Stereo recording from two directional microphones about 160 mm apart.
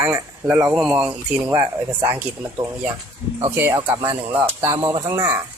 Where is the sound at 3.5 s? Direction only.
15° right (ahead or behind).